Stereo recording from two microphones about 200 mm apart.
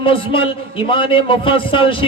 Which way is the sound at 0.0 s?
25° left (ahead or behind).